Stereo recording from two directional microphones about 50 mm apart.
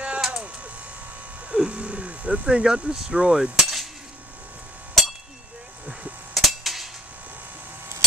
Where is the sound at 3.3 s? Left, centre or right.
Centre.